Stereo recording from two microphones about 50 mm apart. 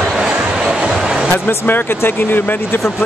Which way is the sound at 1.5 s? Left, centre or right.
Left.